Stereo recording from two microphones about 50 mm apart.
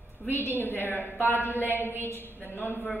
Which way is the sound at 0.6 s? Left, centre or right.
Left.